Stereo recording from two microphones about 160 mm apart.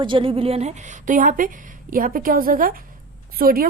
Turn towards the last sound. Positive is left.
turn(degrees=-65)  # may be behind; listen again after turning